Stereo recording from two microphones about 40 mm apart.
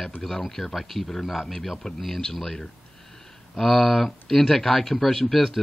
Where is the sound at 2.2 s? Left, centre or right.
Centre.